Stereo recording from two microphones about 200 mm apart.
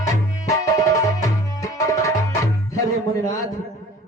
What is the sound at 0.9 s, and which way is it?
Tabla, 15° left (ahead or behind).